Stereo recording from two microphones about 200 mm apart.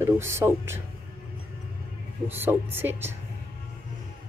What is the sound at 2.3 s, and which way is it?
Speech, 10° right (ahead or behind).